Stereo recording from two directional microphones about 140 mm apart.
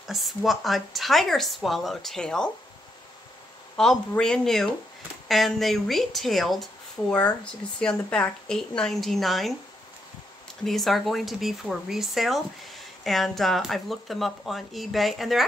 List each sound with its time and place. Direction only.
0.0 s speech: centre (ahead or behind)
3.7 s speech: 5° left (ahead or behind)
10.6 s speech: centre (ahead or behind)